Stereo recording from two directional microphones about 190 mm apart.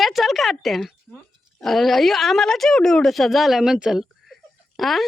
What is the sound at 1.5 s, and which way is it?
Speech, centre (ahead or behind).